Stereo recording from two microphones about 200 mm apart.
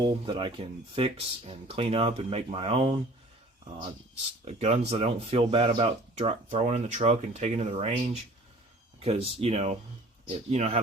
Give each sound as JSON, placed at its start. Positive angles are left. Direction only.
{"t": 0.1, "sound": "speech", "side_deg": -25}
{"t": 4.4, "sound": "speech", "side_deg": -30}